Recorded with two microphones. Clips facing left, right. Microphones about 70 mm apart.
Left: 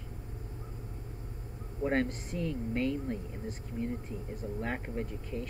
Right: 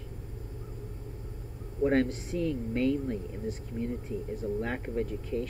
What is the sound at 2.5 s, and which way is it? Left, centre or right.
Speech, left.